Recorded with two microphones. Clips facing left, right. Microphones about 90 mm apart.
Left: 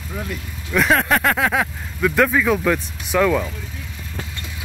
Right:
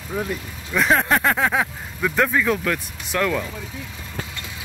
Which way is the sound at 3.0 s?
15° left (ahead or behind).